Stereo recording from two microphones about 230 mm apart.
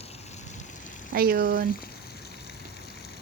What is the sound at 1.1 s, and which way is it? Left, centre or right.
Speech, right.